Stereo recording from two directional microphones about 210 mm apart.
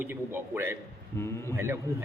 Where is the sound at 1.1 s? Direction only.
10° left (ahead or behind).